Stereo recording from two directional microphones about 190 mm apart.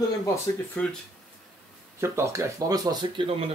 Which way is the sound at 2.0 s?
15° right (ahead or behind).